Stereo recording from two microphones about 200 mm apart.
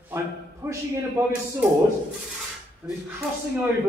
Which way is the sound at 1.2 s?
15° right (ahead or behind).